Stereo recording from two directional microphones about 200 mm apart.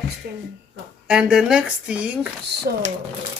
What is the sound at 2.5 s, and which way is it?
Speech, 55° right (ahead or behind).